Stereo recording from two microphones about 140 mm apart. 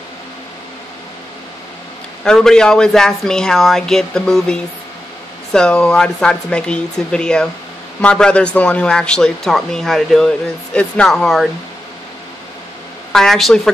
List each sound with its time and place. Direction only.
2.2 s speech: 5° left (ahead or behind)
13.1 s speech: centre (ahead or behind)